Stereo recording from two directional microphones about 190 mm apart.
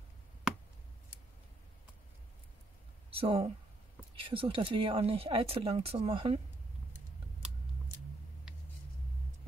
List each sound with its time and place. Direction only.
3.2 s speech: 30° right (ahead or behind)